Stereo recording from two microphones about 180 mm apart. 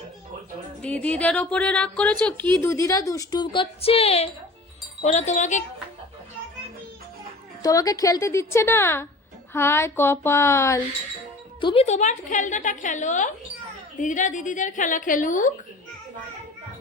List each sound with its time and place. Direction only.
0.8 s a woman's voice: 5° left (ahead or behind); by 5.6 s 40° left (ahead or behind)
7.6 s a woman's voice: 20° left (ahead or behind)
11.6 s a woman's voice: 30° left (ahead or behind)